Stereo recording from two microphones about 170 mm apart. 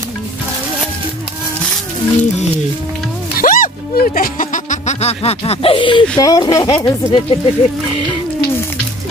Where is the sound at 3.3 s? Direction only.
55° left (ahead or behind).